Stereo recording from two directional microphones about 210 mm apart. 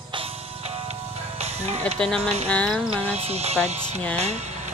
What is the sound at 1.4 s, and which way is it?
Music, 30° right (ahead or behind).